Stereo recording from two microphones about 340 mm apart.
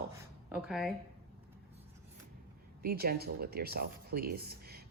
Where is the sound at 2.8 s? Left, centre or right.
Right.